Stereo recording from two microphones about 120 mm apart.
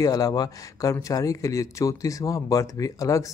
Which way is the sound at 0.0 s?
30° left (ahead or behind).